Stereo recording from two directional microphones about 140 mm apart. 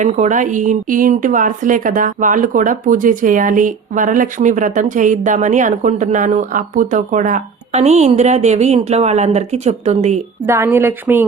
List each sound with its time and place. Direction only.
0.0 s a woman's voice: 60° right (ahead or behind)
10.4 s speech: 20° right (ahead or behind)